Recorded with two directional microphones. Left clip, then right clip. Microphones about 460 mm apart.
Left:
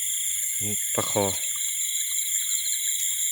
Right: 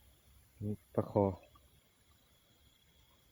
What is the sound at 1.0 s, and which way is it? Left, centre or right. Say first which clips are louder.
Speech: left 7 dB; right.